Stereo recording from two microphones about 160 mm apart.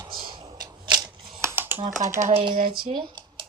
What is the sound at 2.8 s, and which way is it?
Computer keyboard, 30° right (ahead or behind).